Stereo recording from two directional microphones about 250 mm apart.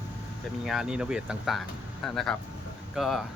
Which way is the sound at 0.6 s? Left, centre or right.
Centre.